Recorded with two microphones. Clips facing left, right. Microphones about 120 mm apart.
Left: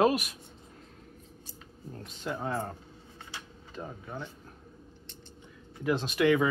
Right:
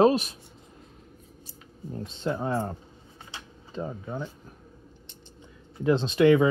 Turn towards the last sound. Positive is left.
turn(degrees=-25)  # may be behind; listen again after turning